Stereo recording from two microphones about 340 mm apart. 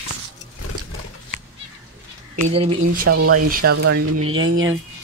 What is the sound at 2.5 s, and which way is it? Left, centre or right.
Speech, centre.